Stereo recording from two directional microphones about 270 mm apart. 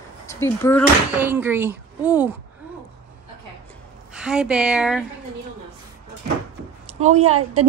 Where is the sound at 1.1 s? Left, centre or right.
Centre.